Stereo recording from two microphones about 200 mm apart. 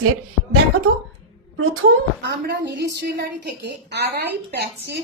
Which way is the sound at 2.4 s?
55° right (ahead or behind).